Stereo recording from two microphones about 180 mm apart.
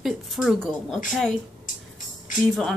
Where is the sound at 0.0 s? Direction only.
Centre (ahead or behind).